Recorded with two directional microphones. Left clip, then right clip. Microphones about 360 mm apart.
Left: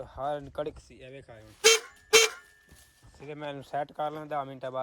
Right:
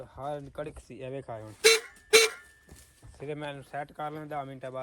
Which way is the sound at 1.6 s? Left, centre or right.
Centre.